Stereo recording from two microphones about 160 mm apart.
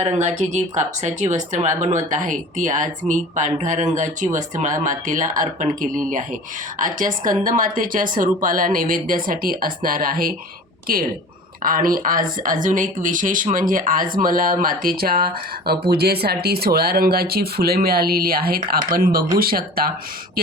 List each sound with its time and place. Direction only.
0.0 s speech: 45° right (ahead or behind); by 19.8 s 70° right (ahead or behind)